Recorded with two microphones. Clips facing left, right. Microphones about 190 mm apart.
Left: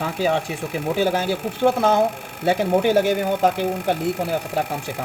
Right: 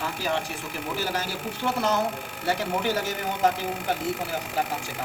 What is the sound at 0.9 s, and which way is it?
Speech, 60° left (ahead or behind).